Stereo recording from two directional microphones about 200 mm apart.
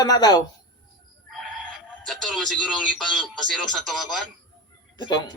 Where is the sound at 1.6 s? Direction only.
5° left (ahead or behind).